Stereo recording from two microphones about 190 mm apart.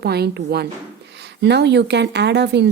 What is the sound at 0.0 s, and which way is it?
A woman's voice, 60° right (ahead or behind).